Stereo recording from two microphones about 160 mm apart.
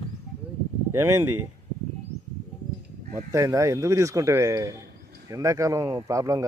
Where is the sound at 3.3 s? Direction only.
20° right (ahead or behind).